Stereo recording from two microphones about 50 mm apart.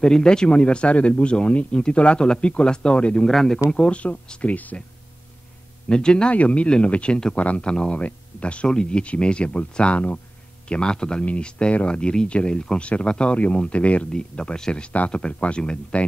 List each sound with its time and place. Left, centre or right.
0.0 s speech: centre
3.3 s speech: centre
3.7 s speech: left
5.9 s speech: centre
10.7 s speech: centre